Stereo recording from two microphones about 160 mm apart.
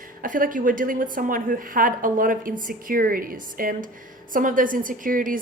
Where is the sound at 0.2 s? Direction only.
60° right (ahead or behind).